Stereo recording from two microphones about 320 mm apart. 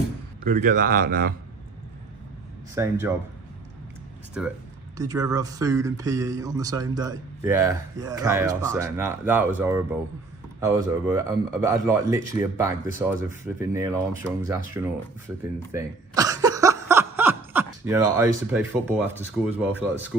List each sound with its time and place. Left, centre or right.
0.4 s a man's voice: right
2.7 s speech: centre
4.4 s speech: centre
15.7 s a sound: centre
19.5 s speech: centre